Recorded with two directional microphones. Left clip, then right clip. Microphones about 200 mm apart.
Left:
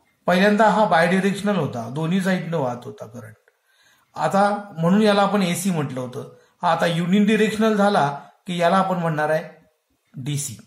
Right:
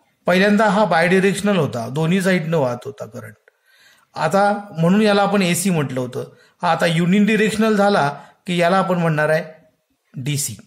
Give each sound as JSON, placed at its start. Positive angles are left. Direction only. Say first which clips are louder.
{"t": 0.2, "sound": "speech", "louder": "right 1 dB", "side_deg": -40}